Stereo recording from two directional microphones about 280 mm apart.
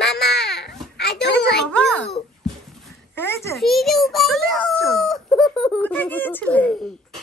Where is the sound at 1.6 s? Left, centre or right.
Centre.